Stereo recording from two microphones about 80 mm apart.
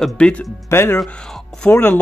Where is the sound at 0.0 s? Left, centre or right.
Centre.